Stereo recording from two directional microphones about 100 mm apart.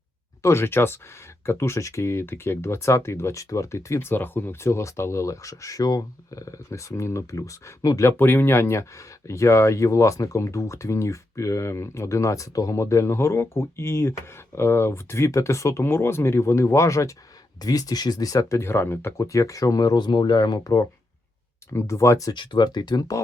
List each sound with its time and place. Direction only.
0.4 s speech: 25° left (ahead or behind)
8.1 s speech: 20° left (ahead or behind)
22.4 s speech: 45° left (ahead or behind)